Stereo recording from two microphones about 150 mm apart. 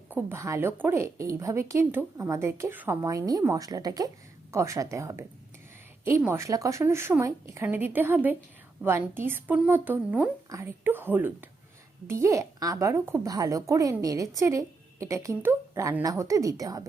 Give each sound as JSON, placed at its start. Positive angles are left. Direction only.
{"t": 0.1, "sound": "a woman's voice", "side_deg": -15}